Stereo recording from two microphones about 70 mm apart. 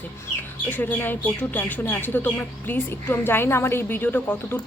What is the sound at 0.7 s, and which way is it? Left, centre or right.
Speech, left.